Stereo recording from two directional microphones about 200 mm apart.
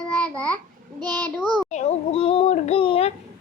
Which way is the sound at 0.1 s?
5° left (ahead or behind).